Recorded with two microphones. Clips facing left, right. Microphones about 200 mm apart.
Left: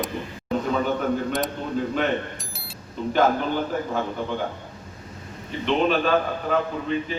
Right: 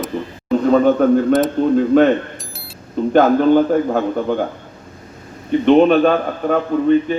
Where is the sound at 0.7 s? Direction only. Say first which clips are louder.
Right 13 dB; 45° right (ahead or behind).